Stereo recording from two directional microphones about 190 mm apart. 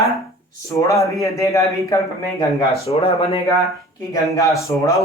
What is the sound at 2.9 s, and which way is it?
Speech, 30° left (ahead or behind).